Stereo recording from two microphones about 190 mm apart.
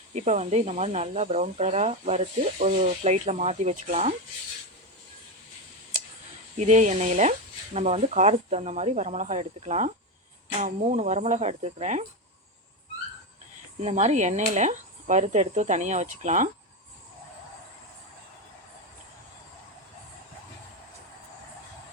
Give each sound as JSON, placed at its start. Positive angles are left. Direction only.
{"t": 0.1, "sound": "speech", "side_deg": -35}
{"t": 6.6, "sound": "speech", "side_deg": -40}
{"t": 13.8, "sound": "speech", "side_deg": -35}